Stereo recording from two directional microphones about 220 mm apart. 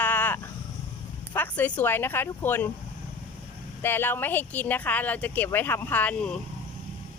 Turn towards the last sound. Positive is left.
turn(degrees=5)  # may be behind; listen again after turning